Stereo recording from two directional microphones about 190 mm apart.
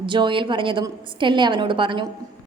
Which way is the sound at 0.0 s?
25° right (ahead or behind).